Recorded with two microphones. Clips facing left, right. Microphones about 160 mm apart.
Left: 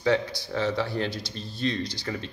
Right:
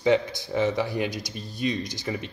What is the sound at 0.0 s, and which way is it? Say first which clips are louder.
Speech: right 3 dB; 20° right (ahead or behind).